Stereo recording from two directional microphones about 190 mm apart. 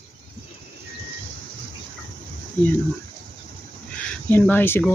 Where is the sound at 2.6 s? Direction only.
10° left (ahead or behind).